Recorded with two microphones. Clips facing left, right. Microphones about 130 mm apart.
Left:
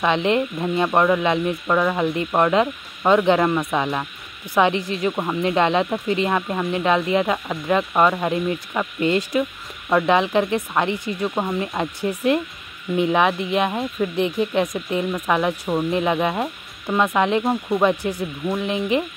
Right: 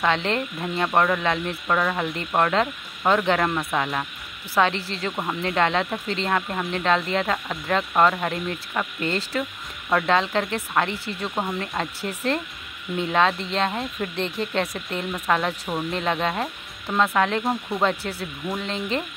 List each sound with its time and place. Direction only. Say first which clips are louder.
0.0 s speech: left 4 dB; 15° left (ahead or behind)